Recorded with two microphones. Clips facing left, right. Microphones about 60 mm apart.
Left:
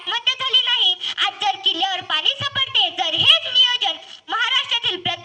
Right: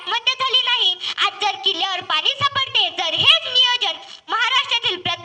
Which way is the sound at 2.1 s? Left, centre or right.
Right.